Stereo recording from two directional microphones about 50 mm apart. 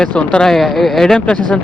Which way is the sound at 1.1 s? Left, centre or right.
Left.